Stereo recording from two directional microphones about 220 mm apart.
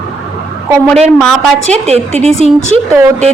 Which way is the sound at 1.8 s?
30° right (ahead or behind).